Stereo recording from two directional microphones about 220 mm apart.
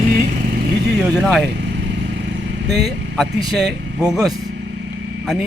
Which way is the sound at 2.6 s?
50° right (ahead or behind).